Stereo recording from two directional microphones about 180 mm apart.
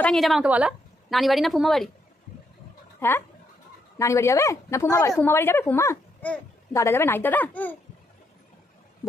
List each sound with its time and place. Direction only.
0.0 s speech: centre (ahead or behind)
3.0 s a woman's voice: 10° left (ahead or behind)